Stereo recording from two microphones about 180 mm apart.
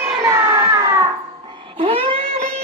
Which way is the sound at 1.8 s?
30° right (ahead or behind).